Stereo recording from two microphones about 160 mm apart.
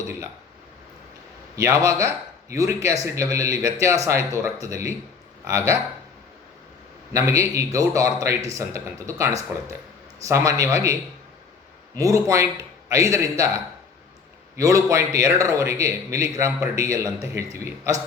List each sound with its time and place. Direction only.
1.5 s a man's voice: 20° right (ahead or behind)
7.1 s a man's voice: 20° right (ahead or behind)
11.9 s a man's voice: 20° right (ahead or behind)
14.5 s a man's voice: 20° right (ahead or behind)